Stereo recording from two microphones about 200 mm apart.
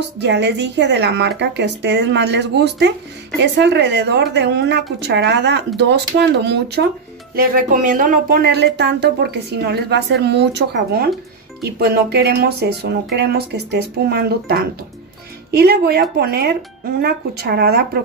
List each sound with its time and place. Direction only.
0.2 s speech: 60° right (ahead or behind)
7.3 s speech: 45° right (ahead or behind)